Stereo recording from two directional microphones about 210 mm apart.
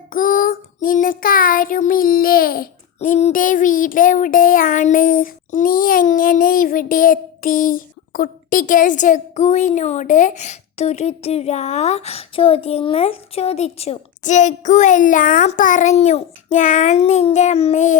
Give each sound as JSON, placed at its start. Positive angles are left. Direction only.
{"t": 0.1, "sound": "child singing", "side_deg": 40}